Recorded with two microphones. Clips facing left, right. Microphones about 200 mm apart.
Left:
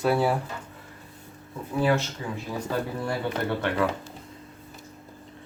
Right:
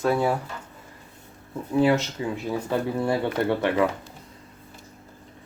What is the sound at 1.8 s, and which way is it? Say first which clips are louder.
Speech: right 4 dB; 20° right (ahead or behind).